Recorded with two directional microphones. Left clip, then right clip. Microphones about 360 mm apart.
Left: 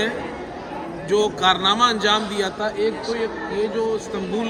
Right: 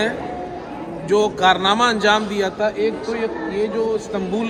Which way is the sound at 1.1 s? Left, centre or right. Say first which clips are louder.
Right 3 dB; centre.